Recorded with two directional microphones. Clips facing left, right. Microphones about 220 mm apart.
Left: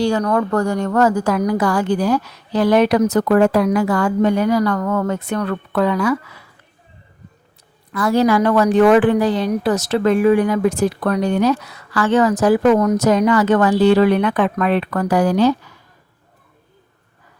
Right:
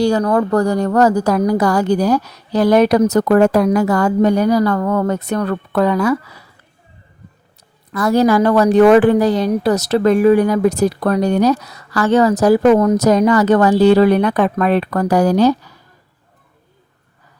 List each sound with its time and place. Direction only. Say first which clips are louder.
0.0 s a woman's voice: right 3 dB; 35° right (ahead or behind)
7.9 s a woman's voice: right 2 dB; 40° right (ahead or behind)